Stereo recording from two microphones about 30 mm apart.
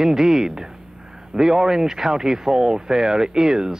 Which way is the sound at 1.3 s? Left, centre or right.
Right.